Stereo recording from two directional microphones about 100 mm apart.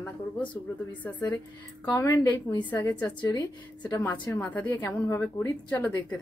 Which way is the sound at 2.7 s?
15° left (ahead or behind).